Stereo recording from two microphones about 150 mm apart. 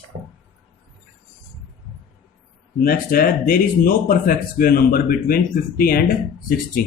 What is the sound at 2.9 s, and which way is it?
Speech, 75° left (ahead or behind).